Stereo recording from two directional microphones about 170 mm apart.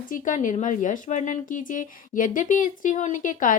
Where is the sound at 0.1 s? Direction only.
50° left (ahead or behind).